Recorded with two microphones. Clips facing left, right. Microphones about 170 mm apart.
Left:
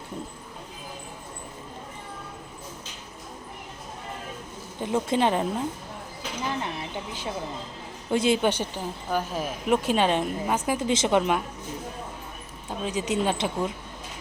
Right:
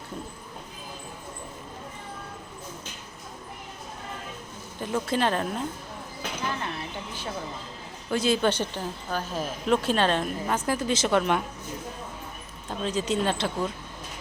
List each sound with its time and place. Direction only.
4.8 s a woman's voice: 20° left (ahead or behind)
6.6 s a sound: 15° left (ahead or behind)
8.1 s speech: 20° left (ahead or behind)
12.6 s speech: 15° left (ahead or behind)